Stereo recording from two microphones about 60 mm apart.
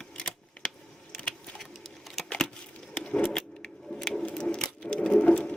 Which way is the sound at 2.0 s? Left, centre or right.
Centre.